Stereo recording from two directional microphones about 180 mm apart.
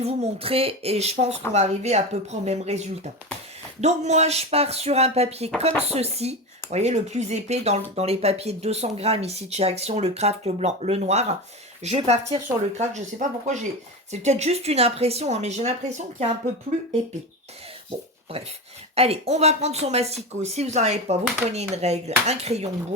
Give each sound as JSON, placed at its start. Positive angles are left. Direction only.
{"t": 0.0, "sound": "speech", "side_deg": -35}
{"t": 18.9, "sound": "speech", "side_deg": -35}